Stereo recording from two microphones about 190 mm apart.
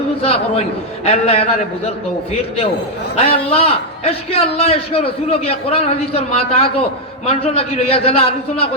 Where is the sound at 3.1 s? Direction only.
30° left (ahead or behind).